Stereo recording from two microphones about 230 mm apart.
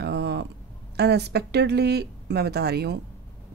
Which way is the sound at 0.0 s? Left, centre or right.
Right.